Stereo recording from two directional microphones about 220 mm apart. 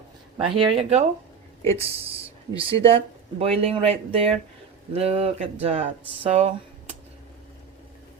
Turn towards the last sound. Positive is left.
turn(degrees=-30)  # may be behind; listen again after turning